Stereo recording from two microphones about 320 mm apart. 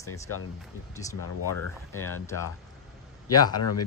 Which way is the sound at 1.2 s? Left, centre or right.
Left.